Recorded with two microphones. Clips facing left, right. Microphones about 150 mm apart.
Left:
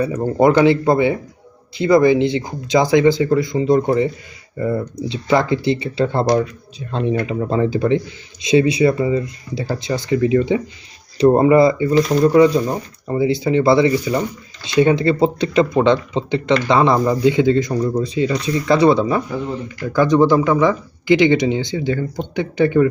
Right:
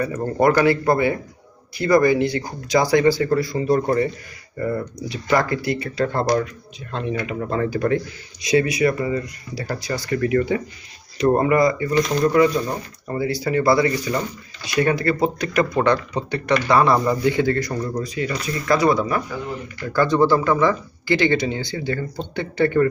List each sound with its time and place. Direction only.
0.0 s speech: 15° left (ahead or behind)